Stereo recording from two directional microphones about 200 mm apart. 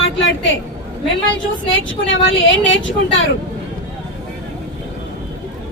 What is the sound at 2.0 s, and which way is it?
A woman's voice, 70° left (ahead or behind).